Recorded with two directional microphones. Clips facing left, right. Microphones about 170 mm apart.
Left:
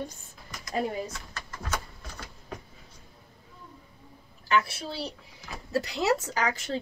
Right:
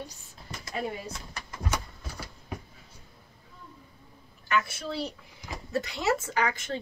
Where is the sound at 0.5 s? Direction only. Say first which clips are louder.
Right 2 dB; 30° right (ahead or behind).